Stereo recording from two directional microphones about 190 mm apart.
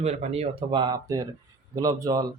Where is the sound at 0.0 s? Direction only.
35° right (ahead or behind).